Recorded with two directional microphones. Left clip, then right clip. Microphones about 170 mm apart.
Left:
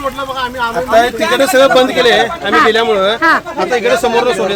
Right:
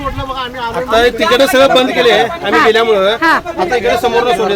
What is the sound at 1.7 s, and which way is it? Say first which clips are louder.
Speech: even; centre (ahead or behind).